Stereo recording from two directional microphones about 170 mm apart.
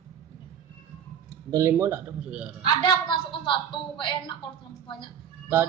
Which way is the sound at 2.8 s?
30° left (ahead or behind).